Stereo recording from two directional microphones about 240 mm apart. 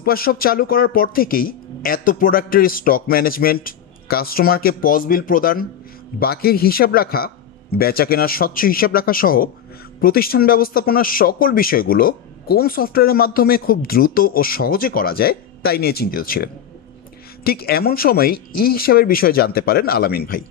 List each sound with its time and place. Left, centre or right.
0.0 s speech: left